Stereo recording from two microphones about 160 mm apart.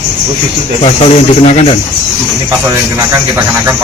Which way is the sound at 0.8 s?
45° left (ahead or behind).